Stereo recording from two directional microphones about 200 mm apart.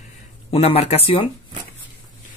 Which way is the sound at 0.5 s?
30° left (ahead or behind).